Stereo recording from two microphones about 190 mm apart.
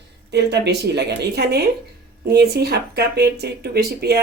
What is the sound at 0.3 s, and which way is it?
Speech, 60° right (ahead or behind).